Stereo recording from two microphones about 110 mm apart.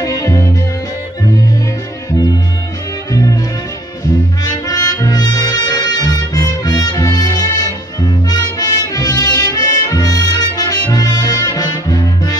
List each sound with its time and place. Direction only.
0.0 s music: 35° left (ahead or behind)
3.1 s music: 35° left (ahead or behind)
4.4 s brass instrument: 35° left (ahead or behind)
8.3 s music: 35° left (ahead or behind)